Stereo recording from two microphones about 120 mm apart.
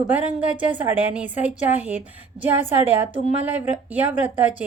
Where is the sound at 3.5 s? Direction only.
15° right (ahead or behind).